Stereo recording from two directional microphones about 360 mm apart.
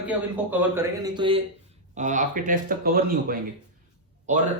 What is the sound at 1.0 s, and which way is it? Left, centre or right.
A man's voice, centre.